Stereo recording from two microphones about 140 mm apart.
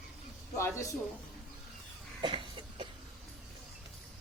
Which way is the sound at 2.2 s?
35° right (ahead or behind).